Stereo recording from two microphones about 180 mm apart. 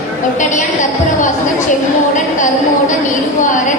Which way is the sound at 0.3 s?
45° left (ahead or behind).